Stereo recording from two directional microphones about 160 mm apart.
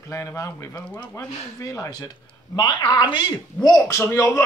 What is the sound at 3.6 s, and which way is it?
Speech, 10° left (ahead or behind).